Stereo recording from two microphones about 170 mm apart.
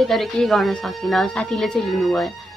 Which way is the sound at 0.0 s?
Centre (ahead or behind).